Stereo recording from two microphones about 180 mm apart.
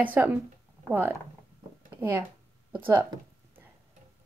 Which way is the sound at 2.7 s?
10° right (ahead or behind).